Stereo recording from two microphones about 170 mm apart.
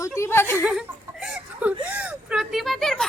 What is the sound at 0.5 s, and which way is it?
Speech, 5° right (ahead or behind).